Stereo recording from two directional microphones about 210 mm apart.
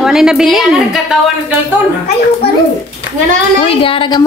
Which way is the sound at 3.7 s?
25° left (ahead or behind).